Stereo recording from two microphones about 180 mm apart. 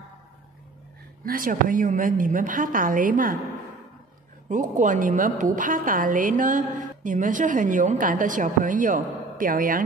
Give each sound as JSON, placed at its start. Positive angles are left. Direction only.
{"t": 1.2, "sound": "a woman's voice", "side_deg": -50}
{"t": 4.5, "sound": "a woman's voice", "side_deg": -45}